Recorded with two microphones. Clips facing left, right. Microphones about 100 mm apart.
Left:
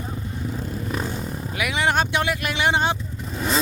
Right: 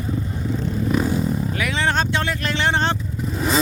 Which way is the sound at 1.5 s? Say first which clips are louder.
Left 3 dB; 15° left (ahead or behind).